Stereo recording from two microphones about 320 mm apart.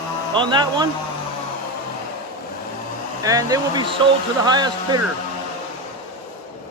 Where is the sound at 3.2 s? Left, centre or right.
Centre.